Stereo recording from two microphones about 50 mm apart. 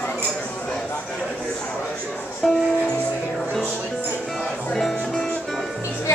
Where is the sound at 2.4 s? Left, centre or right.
Centre.